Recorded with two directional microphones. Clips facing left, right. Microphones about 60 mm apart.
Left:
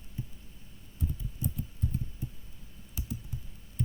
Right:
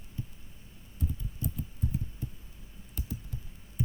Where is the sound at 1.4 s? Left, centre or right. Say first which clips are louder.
Left 1 dB; centre.